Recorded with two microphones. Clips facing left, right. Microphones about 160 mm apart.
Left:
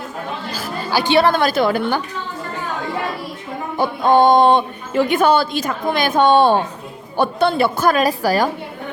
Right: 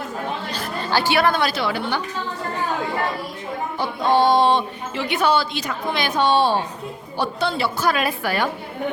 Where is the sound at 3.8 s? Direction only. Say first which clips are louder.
Left 5 dB; 50° left (ahead or behind).